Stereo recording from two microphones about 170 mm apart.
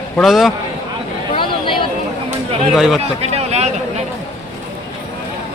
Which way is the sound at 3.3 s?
40° right (ahead or behind).